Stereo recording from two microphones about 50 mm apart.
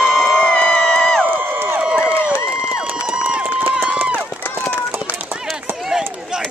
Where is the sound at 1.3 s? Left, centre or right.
Right.